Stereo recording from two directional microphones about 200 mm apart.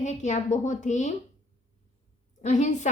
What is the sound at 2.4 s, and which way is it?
Speech, 35° left (ahead or behind).